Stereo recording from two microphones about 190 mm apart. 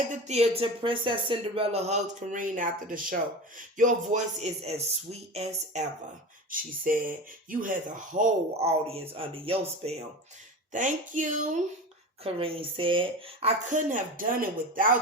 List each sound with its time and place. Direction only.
0.1 s speech: 35° right (ahead or behind)
6.5 s speech: 45° right (ahead or behind)
10.7 s speech: 40° right (ahead or behind)
12.2 s speech: 30° right (ahead or behind)